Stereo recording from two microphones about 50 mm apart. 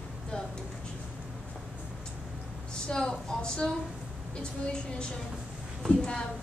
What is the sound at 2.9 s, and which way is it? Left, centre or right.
Speech, centre.